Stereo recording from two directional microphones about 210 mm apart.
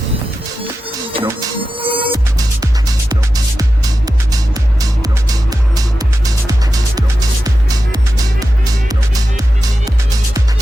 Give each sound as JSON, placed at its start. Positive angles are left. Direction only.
{"t": 1.1, "sound": "music", "side_deg": -25}